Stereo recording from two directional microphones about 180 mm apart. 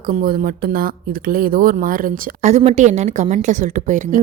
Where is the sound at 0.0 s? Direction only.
50° right (ahead or behind).